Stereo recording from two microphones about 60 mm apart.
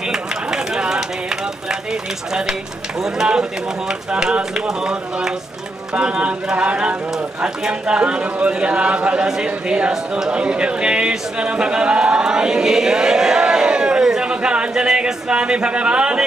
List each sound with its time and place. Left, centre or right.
0.1 s run: centre
3.0 s a man's voice: centre